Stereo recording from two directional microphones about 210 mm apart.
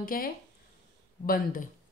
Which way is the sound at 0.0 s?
45° left (ahead or behind).